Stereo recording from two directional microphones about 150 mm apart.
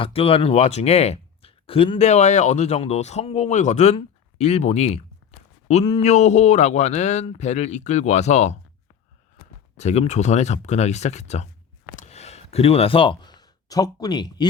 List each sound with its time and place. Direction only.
0.0 s speech: 40° left (ahead or behind)
9.7 s speech: 45° left (ahead or behind)
11.9 s a sound: 45° left (ahead or behind); by 14.4 s 30° left (ahead or behind)